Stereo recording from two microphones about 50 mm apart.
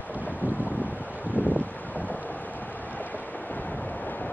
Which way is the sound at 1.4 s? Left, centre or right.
Left.